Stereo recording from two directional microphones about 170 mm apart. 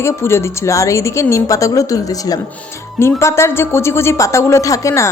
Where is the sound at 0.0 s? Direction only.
15° left (ahead or behind).